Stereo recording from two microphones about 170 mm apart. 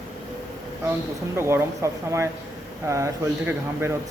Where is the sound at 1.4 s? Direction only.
15° right (ahead or behind).